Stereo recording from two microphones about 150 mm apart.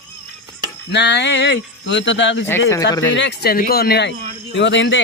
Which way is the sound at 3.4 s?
85° left.